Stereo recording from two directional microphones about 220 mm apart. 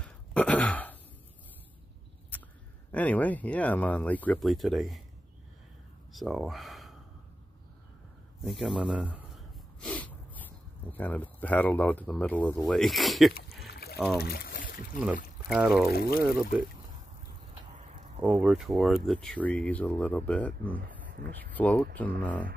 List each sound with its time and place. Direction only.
0.0 s a sound: 5° left (ahead or behind)
2.9 s speech: 5° left (ahead or behind)
6.1 s speech: centre (ahead or behind)
8.5 s speech: centre (ahead or behind)
13.7 s a sound: 45° left (ahead or behind)
14.1 s pour: 45° left (ahead or behind)
15.4 s speech: 5° right (ahead or behind)
15.9 s speech: 45° left (ahead or behind)
17.7 s a sound: 35° right (ahead or behind)
18.2 s speech: 5° right (ahead or behind)